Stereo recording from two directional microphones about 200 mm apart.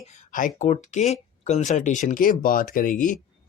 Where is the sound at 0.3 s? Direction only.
40° left (ahead or behind).